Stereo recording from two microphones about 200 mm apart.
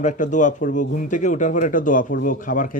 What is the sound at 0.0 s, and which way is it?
Speech, 40° left (ahead or behind).